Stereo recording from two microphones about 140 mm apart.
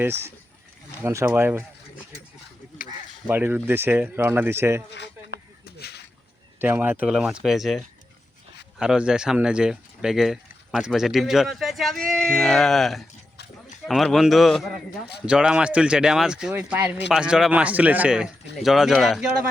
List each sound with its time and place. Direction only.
0.0 s speech: 15° right (ahead or behind)
3.2 s speech: 15° right (ahead or behind)
6.6 s speech: 15° right (ahead or behind)